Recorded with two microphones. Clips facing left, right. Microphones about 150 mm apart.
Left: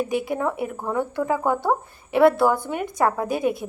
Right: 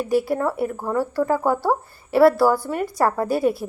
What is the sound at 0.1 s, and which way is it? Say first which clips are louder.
Speech: right 4 dB; centre (ahead or behind).